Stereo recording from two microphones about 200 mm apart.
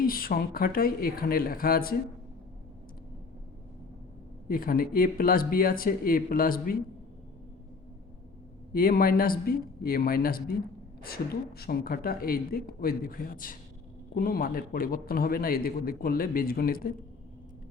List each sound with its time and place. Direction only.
0.0 s a man's voice: 45° left (ahead or behind)
4.4 s a man's voice: 45° left (ahead or behind)
8.7 s a man's voice: 45° left (ahead or behind)